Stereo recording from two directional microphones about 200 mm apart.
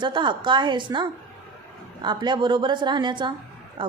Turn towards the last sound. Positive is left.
turn(degrees=-25)  # may be behind; listen again after turning